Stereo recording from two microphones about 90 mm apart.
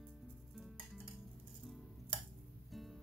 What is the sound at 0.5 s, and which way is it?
Music, centre (ahead or behind).